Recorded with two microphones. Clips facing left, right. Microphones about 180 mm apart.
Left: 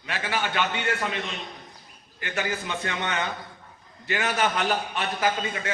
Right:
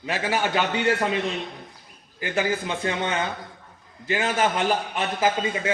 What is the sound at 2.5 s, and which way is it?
A man's voice, 30° right (ahead or behind).